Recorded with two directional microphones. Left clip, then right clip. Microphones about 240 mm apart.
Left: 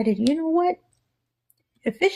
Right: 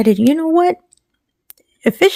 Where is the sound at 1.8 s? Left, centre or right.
Right.